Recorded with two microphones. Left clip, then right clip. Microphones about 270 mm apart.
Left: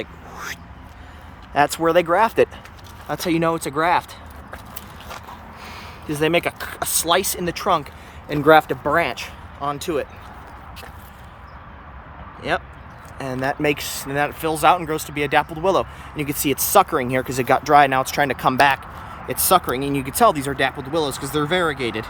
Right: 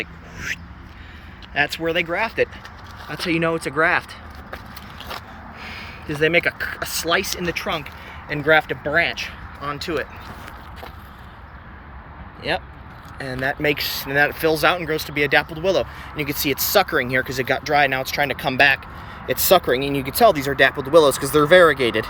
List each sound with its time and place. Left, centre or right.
1.8 s speech: left
5.6 s a sound: centre
6.6 s speech: centre
12.4 s speech: centre